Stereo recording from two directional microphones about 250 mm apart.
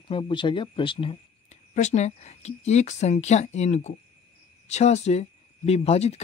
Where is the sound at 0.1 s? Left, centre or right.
Centre.